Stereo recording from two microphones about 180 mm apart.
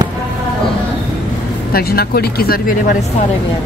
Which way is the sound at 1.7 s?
55° left (ahead or behind).